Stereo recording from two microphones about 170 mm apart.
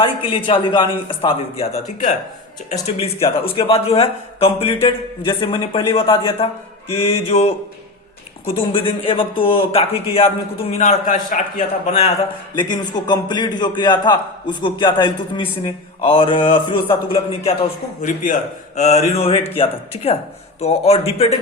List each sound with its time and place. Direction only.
0.2 s a man's voice: 30° left (ahead or behind)
2.8 s a man's voice: 35° left (ahead or behind)
8.5 s a man's voice: 30° left (ahead or behind)
12.5 s a man's voice: 25° left (ahead or behind)